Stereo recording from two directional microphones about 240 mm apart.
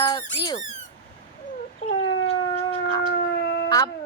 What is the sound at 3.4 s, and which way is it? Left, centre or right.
Howl, left.